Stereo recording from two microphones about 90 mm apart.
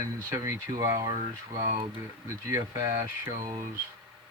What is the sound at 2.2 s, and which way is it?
Speech, 40° right (ahead or behind).